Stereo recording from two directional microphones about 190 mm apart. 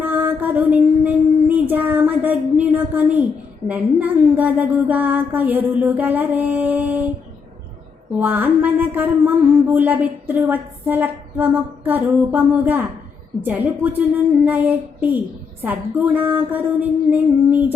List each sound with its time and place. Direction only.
0.0 s child singing: 10° right (ahead or behind)
3.7 s speech: 10° right (ahead or behind)
8.2 s speech: 10° right (ahead or behind)
10.5 s a sound: 10° right (ahead or behind)
11.9 s speech: 10° right (ahead or behind)